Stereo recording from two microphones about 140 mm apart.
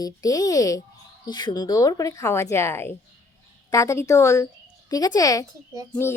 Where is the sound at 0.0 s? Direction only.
25° left (ahead or behind).